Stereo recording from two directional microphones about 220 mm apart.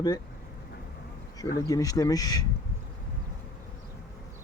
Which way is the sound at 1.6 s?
15° left (ahead or behind).